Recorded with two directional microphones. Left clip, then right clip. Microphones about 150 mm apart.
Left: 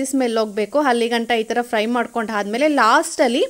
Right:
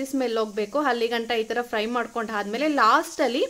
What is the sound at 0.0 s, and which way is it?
A woman's voice, 40° left (ahead or behind).